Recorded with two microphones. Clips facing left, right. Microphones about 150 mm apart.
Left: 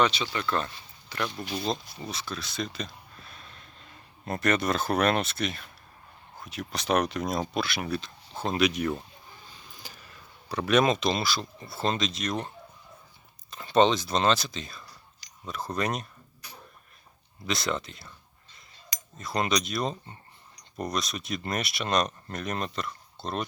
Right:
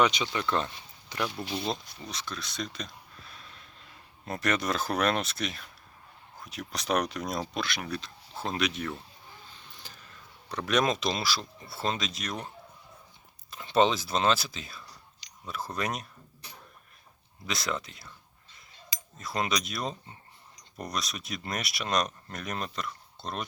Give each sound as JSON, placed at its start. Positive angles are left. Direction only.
{"t": 0.0, "sound": "speech", "side_deg": -15}
{"t": 1.6, "sound": "speech", "side_deg": 0}
{"t": 13.5, "sound": "speech", "side_deg": 0}
{"t": 17.4, "sound": "speech", "side_deg": 0}
{"t": 19.2, "sound": "speech", "side_deg": 0}